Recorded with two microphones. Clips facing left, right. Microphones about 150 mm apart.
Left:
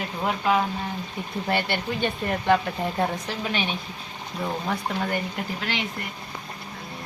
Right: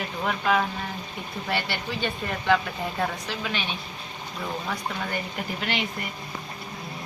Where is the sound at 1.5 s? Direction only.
50° left (ahead or behind).